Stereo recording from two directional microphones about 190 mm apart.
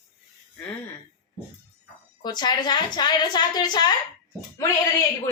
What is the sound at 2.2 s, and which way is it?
A woman's voice, 20° left (ahead or behind).